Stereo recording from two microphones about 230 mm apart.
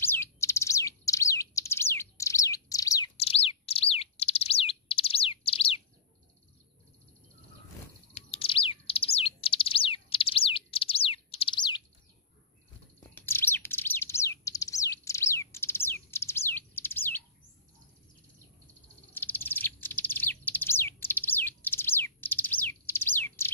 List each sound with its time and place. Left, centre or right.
0.0 s bird: centre
3.2 s bird: left
8.1 s bird: left
13.0 s bird: centre
19.1 s bird: centre